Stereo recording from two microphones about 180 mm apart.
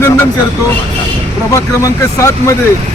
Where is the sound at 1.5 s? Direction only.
15° left (ahead or behind).